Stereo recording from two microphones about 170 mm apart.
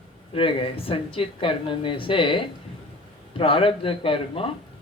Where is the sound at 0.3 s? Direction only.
30° left (ahead or behind).